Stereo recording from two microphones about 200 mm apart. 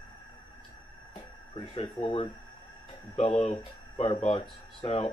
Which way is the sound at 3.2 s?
35° left (ahead or behind).